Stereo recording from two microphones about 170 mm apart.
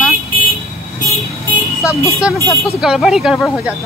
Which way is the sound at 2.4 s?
15° left (ahead or behind).